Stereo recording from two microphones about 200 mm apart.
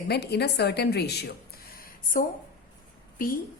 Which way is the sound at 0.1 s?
55° left (ahead or behind).